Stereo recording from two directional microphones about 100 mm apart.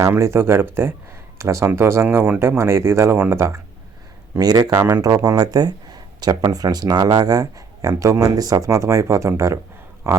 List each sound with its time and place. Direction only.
0.2 s speech: 25° right (ahead or behind)
4.4 s speech: 40° right (ahead or behind)